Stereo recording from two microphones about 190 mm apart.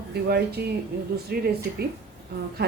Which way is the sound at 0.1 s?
55° right (ahead or behind).